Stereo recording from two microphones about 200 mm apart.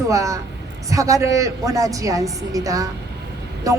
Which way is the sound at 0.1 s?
15° right (ahead or behind).